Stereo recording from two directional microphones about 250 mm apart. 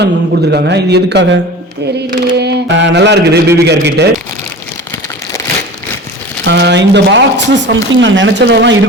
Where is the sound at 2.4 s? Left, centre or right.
Right.